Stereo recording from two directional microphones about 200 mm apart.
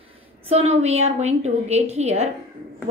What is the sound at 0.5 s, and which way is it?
A woman's voice, 30° right (ahead or behind).